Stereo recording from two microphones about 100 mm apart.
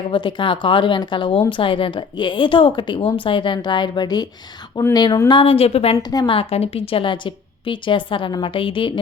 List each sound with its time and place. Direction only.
0.1 s a woman's voice: 55° left (ahead or behind)
5.3 s a woman's voice: 65° left (ahead or behind); by 6.0 s 90° left
6.0 s a woman's voice: 40° left (ahead or behind)
6.2 s a woman's voice: 70° left (ahead or behind)